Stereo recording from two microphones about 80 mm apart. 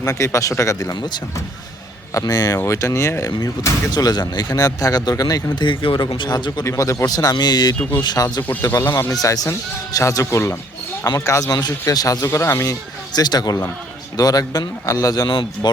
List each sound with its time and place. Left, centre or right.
0.0 s speech: left
0.9 s speech: left
2.1 s speech: left
2.6 s speech: left
3.9 s speech: left
5.5 s speech: left
6.7 s speech: left
7.8 s speech: left
8.0 s speech: left
11.3 s speech: left
12.2 s speech: left
13.1 s speech: left
15.3 s speech: left